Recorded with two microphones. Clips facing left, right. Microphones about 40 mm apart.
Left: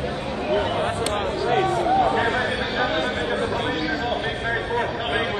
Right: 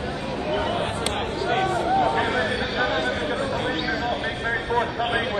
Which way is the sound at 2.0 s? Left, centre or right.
Centre.